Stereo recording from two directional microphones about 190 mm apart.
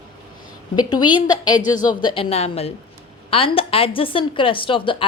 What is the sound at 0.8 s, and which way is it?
A woman's voice, 20° left (ahead or behind).